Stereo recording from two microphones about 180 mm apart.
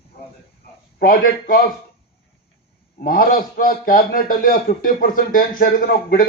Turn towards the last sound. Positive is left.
turn(degrees=55)  # may be behind; listen again after turning